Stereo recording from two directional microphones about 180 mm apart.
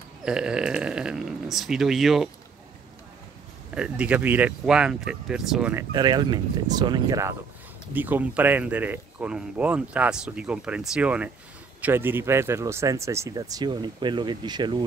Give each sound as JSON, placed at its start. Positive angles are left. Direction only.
{"t": 0.2, "sound": "speech", "side_deg": -5}
{"t": 3.7, "sound": "speech", "side_deg": -5}
{"t": 5.9, "sound": "speech", "side_deg": -25}